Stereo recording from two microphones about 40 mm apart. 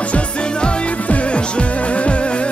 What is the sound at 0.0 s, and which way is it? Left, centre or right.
Music, left.